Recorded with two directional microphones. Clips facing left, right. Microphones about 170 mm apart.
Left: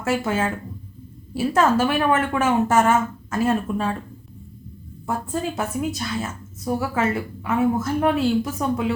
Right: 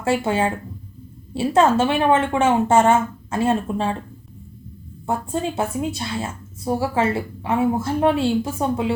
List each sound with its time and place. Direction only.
0.0 s a woman's voice: 30° right (ahead or behind)
5.0 s a woman's voice: 25° right (ahead or behind)